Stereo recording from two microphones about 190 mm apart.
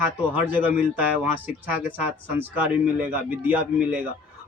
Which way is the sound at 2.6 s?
10° right (ahead or behind).